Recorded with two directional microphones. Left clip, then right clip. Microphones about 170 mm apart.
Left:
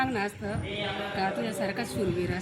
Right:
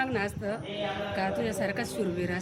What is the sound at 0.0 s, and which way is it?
Music, 40° right (ahead or behind).